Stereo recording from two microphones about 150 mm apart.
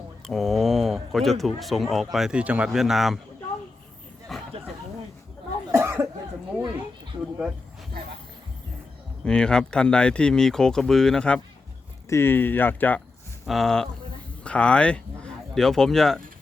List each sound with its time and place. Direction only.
0.3 s speech: centre (ahead or behind)
4.3 s a sound: centre (ahead or behind)
5.7 s cough: 15° right (ahead or behind)
7.1 s a sound: 40° right (ahead or behind)
9.2 s speech: 5° left (ahead or behind)
12.0 s speech: 15° left (ahead or behind)
13.4 s speech: centre (ahead or behind)